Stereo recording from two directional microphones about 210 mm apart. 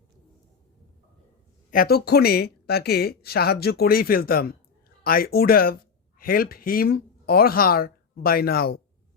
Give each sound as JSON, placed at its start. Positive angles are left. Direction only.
{"t": 1.7, "sound": "speech", "side_deg": 45}